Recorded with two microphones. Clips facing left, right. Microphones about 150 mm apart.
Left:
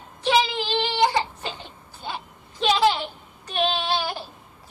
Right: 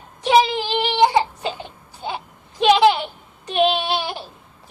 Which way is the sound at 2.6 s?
15° right (ahead or behind).